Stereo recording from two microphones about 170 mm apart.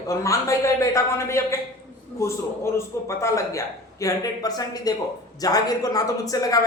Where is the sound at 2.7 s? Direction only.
15° left (ahead or behind).